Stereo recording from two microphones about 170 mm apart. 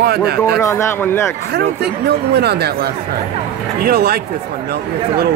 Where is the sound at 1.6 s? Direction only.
75° right (ahead or behind).